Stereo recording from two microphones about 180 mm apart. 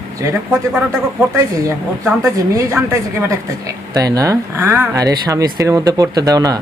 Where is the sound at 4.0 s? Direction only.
20° right (ahead or behind).